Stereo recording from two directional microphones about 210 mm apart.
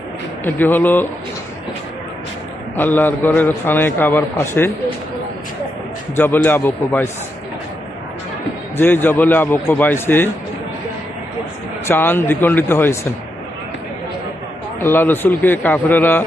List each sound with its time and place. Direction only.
0.4 s a man's voice: 10° left (ahead or behind)
2.7 s a man's voice: 10° left (ahead or behind)
6.1 s a man's voice: 10° left (ahead or behind)
8.8 s a man's voice: 10° left (ahead or behind)
11.9 s a man's voice: 10° left (ahead or behind)
14.8 s a man's voice: 10° left (ahead or behind)